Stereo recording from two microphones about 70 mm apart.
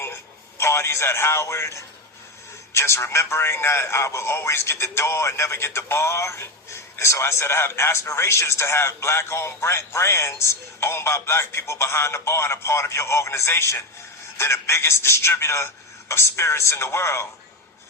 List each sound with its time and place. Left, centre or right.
0.6 s a man's voice: left